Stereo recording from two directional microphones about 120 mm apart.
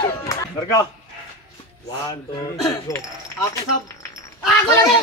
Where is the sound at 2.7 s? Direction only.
30° left (ahead or behind).